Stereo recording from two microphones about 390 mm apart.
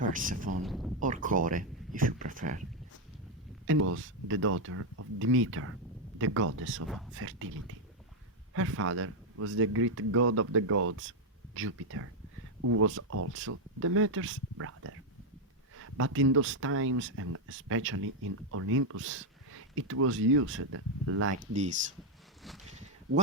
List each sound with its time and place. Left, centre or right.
0.0 s speech: centre
0.6 s speech: centre
0.9 s speech: centre
3.7 s speech: right
8.5 s speech: right
21.3 s speech: centre
22.4 s a sound: centre